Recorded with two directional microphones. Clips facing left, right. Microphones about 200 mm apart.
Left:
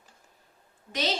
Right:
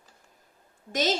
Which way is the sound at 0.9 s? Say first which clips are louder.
Right 4 dB; 45° right (ahead or behind).